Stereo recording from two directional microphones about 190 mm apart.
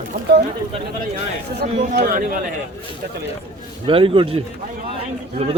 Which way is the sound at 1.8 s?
40° right (ahead or behind).